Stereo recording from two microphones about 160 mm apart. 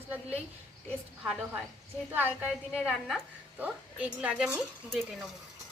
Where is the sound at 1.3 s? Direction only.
5° right (ahead or behind).